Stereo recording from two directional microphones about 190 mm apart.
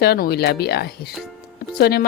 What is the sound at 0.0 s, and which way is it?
A woman's voice, 55° left (ahead or behind).